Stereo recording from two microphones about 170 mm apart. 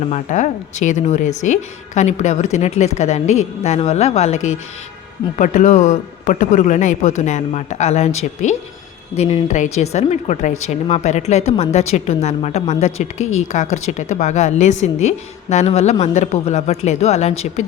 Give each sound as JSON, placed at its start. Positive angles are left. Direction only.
{"t": 0.1, "sound": "a man's voice", "side_deg": 45}